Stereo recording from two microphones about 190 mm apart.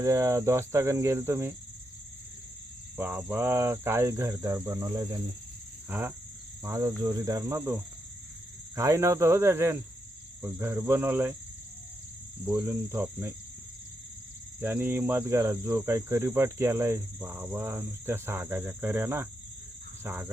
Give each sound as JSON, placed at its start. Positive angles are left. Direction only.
{"t": 0.0, "sound": "cricket", "side_deg": -15}
{"t": 3.0, "sound": "cricket", "side_deg": -10}
{"t": 5.9, "sound": "cricket", "side_deg": -10}
{"t": 12.5, "sound": "cricket", "side_deg": -15}
{"t": 14.6, "sound": "cricket", "side_deg": -10}